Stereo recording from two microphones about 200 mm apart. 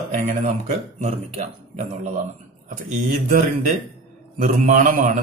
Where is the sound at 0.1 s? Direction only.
30° right (ahead or behind).